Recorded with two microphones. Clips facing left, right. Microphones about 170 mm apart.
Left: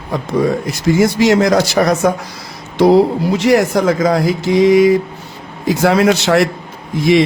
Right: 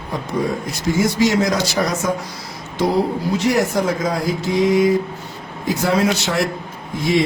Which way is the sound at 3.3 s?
85° left.